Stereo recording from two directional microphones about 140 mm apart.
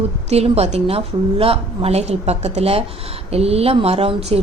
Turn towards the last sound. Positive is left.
turn(degrees=-45)  # may be behind; listen again after turning